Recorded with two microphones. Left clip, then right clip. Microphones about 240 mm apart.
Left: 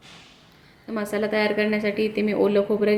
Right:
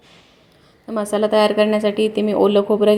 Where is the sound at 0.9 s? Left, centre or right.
Centre.